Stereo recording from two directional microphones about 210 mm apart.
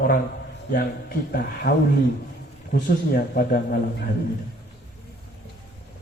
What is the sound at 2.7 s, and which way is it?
A man's voice, 45° left (ahead or behind).